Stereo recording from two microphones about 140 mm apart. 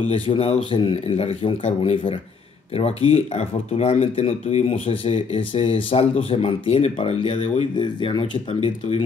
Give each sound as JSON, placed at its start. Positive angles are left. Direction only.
{"t": 0.3, "sound": "speech", "side_deg": 40}
{"t": 7.7, "sound": "speech", "side_deg": 35}